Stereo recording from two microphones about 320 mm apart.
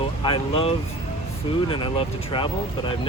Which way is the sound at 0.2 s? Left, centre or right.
Centre.